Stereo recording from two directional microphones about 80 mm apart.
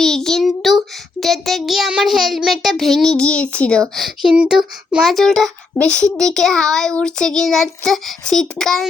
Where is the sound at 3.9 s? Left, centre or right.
Centre.